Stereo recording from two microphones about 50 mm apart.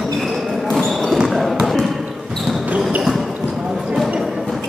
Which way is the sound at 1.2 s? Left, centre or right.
Centre.